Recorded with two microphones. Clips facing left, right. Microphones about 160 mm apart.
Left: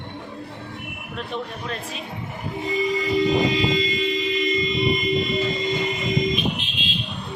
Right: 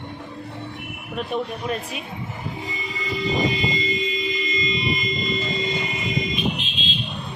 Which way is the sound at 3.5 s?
75° left (ahead or behind).